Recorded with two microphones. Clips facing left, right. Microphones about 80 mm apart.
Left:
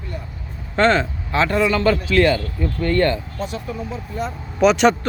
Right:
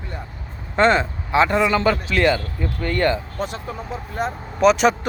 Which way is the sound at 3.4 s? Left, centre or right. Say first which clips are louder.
Left 1 dB; right.